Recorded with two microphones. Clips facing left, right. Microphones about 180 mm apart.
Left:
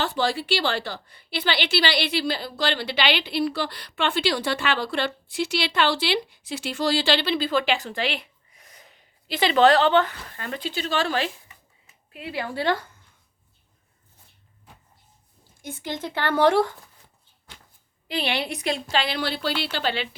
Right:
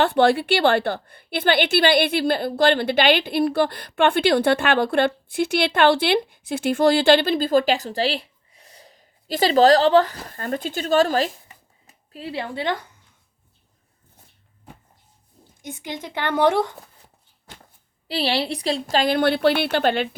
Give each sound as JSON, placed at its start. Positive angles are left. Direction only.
{"t": 0.0, "sound": "a woman's voice", "side_deg": -60}
{"t": 12.1, "sound": "a woman's voice", "side_deg": -30}
{"t": 15.6, "sound": "speech", "side_deg": -15}
{"t": 18.1, "sound": "a woman's voice", "side_deg": -35}